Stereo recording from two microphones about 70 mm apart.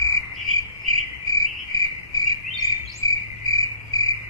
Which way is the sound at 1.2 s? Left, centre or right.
Left.